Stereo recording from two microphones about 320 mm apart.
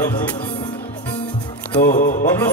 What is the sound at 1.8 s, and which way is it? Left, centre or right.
Music, left.